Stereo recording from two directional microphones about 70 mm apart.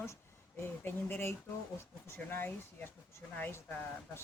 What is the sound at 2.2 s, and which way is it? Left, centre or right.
Speech, left.